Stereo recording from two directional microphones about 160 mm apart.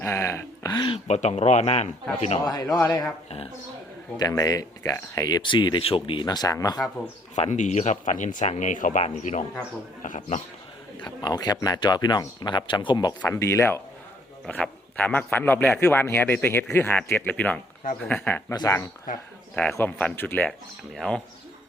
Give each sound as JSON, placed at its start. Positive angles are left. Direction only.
{"t": 0.0, "sound": "speech", "side_deg": 15}
{"t": 0.7, "sound": "speech", "side_deg": 30}
{"t": 2.4, "sound": "speech", "side_deg": 25}
{"t": 3.2, "sound": "speech", "side_deg": 40}
{"t": 4.2, "sound": "speech", "side_deg": 20}
{"t": 7.3, "sound": "speech", "side_deg": 45}
{"t": 11.0, "sound": "a man's voice", "side_deg": 25}
{"t": 19.5, "sound": "speech", "side_deg": 10}